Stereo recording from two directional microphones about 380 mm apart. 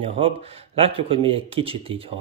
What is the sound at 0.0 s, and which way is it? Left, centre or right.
Speech, centre.